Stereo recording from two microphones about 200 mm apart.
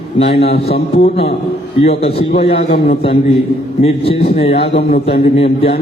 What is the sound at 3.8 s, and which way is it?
A man's voice, 30° left (ahead or behind).